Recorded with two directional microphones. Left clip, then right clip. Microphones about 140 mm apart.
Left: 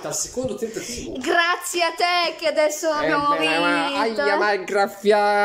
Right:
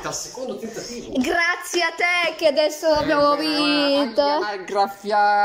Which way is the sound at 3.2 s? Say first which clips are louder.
Right 1 dB; 35° right (ahead or behind).